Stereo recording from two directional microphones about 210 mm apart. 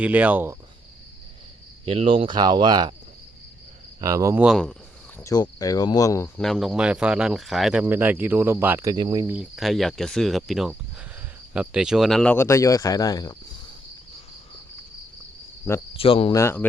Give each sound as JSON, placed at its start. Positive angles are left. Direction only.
{"t": 0.0, "sound": "speech", "side_deg": -5}
{"t": 1.8, "sound": "speech", "side_deg": -25}
{"t": 4.0, "sound": "speech", "side_deg": -15}
{"t": 4.4, "sound": "speech", "side_deg": 0}
{"t": 5.2, "sound": "speech", "side_deg": 15}
{"t": 6.3, "sound": "speech", "side_deg": 0}
{"t": 16.0, "sound": "cricket", "side_deg": 25}
{"t": 16.3, "sound": "speech", "side_deg": 10}